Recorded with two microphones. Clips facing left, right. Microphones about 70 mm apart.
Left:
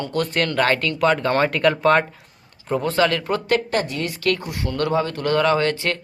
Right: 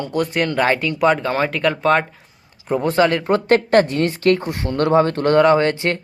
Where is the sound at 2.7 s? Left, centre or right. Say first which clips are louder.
Right 3 dB; right.